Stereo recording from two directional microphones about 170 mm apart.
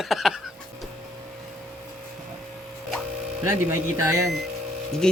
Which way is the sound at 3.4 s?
15° right (ahead or behind).